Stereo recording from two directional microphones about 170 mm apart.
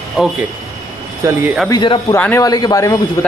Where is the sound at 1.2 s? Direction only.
20° right (ahead or behind).